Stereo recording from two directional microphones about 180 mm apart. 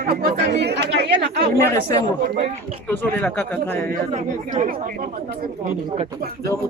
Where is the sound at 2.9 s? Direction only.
10° left (ahead or behind).